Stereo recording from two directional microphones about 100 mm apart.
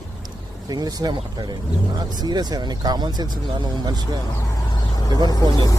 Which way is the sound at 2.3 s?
45° right (ahead or behind).